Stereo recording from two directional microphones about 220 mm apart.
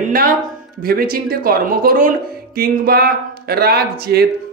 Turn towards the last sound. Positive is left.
turn(degrees=-45)  # may be behind; listen again after turning